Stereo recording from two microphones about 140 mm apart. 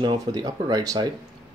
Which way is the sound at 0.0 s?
30° right (ahead or behind).